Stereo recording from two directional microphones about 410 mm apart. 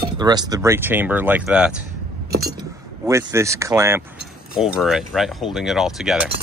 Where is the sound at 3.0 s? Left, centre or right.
Centre.